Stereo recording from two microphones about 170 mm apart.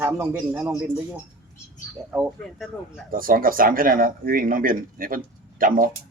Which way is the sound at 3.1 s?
55° right (ahead or behind).